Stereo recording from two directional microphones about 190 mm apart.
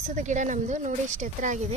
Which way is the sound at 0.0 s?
40° right (ahead or behind).